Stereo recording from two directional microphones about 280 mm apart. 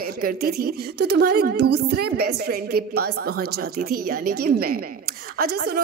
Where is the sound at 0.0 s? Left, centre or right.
Right.